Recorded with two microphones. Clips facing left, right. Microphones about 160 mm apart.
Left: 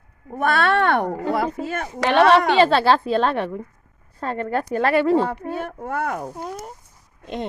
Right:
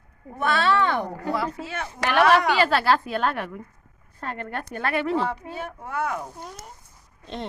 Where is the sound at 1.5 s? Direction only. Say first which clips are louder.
Left 6 dB; 45° left (ahead or behind).